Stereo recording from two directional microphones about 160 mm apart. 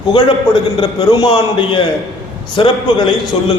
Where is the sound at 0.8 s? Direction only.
30° left (ahead or behind).